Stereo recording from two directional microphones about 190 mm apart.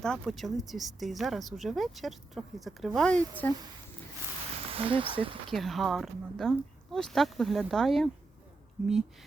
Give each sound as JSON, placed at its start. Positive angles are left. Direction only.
{"t": 0.0, "sound": "speech", "side_deg": 0}
{"t": 4.7, "sound": "speech", "side_deg": -30}
{"t": 5.5, "sound": "speech", "side_deg": 0}